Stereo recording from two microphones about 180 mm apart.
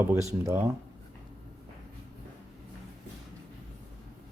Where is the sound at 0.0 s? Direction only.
15° right (ahead or behind).